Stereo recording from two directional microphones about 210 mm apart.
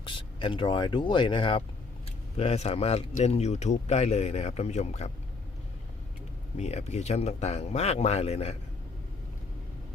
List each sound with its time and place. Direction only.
0.0 s speech: 25° left (ahead or behind)
6.6 s speech: 30° left (ahead or behind)